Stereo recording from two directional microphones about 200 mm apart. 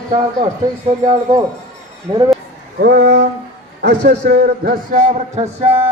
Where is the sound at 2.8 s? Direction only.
55° right (ahead or behind).